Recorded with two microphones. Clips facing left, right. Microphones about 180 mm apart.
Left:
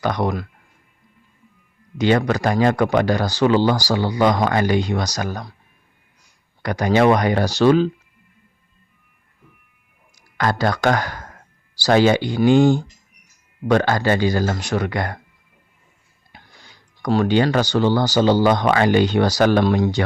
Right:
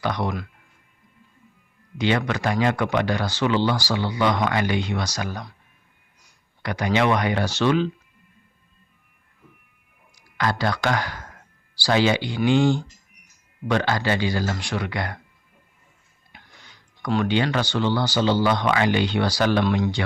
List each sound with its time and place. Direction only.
0.0 s speech: 45° left (ahead or behind)
2.0 s speech: 40° left (ahead or behind)
6.6 s speech: 40° left (ahead or behind)
10.2 s speech: 50° left (ahead or behind)
16.3 s speech: 35° left (ahead or behind)